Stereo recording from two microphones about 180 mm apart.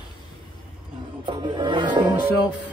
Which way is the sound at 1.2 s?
25° right (ahead or behind).